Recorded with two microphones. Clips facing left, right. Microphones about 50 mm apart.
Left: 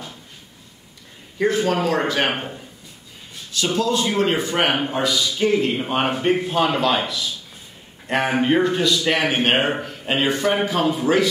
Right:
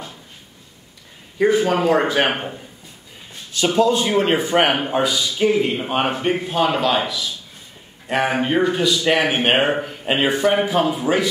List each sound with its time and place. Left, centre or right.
1.4 s a man's voice: centre
3.5 s a man's voice: centre